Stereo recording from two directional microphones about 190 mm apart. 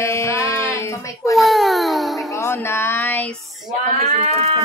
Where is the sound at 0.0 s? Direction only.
15° left (ahead or behind).